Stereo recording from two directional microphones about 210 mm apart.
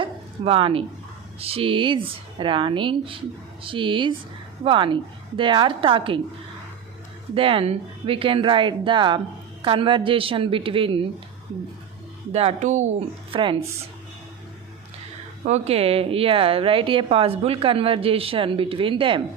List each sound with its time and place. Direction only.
0.0 s dog: 25° right (ahead or behind)
1.4 s speech: 25° right (ahead or behind)
7.3 s speech: 25° right (ahead or behind)
12.3 s speech: 30° right (ahead or behind)
15.4 s speech: 30° right (ahead or behind)